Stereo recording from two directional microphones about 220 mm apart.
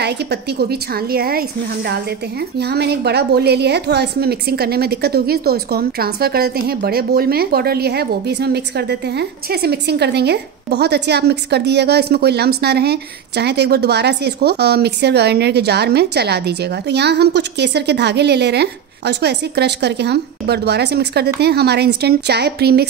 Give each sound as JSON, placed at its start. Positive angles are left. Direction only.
{"t": 0.0, "sound": "a woman's voice", "side_deg": -50}